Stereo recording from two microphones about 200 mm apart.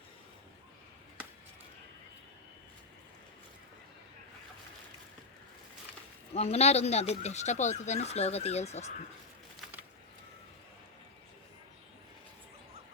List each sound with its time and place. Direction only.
6.3 s speech: 30° left (ahead or behind)